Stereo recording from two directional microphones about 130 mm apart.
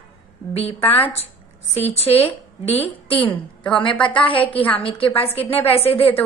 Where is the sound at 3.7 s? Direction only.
40° left (ahead or behind).